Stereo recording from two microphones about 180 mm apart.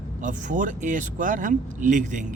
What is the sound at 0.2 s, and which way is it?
Speech, 45° right (ahead or behind).